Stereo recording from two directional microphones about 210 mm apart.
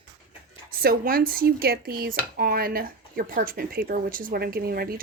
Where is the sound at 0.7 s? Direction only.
45° right (ahead or behind).